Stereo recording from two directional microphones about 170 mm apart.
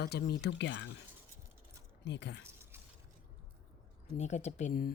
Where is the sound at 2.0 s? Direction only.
90° left.